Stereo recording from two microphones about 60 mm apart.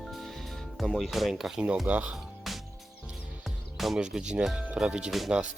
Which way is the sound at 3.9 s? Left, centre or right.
Centre.